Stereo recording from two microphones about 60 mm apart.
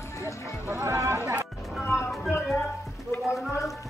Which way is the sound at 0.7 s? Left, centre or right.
Right.